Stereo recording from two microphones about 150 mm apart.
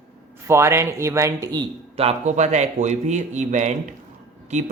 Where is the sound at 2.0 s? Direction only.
45° right (ahead or behind).